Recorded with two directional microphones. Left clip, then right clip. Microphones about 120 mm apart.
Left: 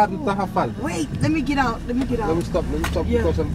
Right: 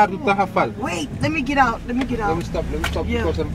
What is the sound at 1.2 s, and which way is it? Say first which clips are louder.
Speech: right 4 dB; 30° right (ahead or behind).